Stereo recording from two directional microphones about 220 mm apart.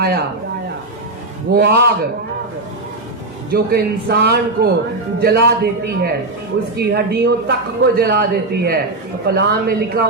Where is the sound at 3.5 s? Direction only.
45° right (ahead or behind).